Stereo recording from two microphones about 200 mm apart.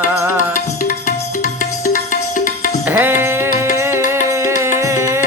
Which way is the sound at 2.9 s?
10° right (ahead or behind).